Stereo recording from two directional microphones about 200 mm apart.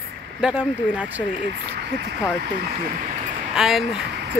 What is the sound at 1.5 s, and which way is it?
Speech, 55° right (ahead or behind).